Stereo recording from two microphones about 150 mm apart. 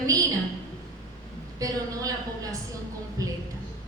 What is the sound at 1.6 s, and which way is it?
Speech, 25° right (ahead or behind).